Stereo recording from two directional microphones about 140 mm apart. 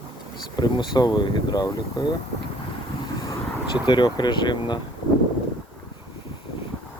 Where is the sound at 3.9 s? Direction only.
30° left (ahead or behind).